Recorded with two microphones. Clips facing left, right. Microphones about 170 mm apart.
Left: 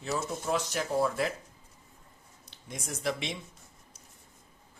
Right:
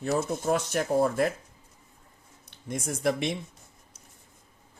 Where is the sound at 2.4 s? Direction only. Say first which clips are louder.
Right 7 dB; 55° right (ahead or behind).